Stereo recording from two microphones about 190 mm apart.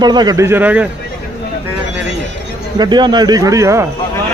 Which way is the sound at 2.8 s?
25° right (ahead or behind).